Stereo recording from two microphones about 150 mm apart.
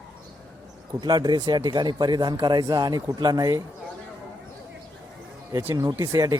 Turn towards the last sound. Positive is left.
turn(degrees=-25)  # may be behind; listen again after turning